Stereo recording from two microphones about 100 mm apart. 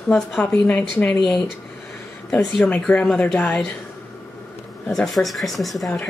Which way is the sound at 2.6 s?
15° left (ahead or behind).